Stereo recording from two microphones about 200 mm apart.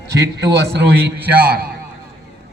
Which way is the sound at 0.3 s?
55° right (ahead or behind).